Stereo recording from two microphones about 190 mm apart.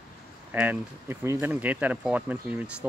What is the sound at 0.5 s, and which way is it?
Speech, 10° right (ahead or behind).